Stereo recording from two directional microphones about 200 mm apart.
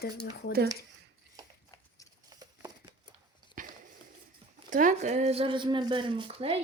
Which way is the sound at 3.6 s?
40° right (ahead or behind).